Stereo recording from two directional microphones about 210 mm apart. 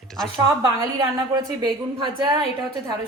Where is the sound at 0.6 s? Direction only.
20° right (ahead or behind).